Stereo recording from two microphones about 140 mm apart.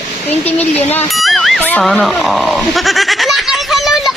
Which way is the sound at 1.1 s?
Centre (ahead or behind).